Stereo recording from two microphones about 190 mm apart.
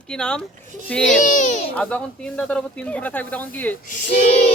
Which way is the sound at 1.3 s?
45° left (ahead or behind).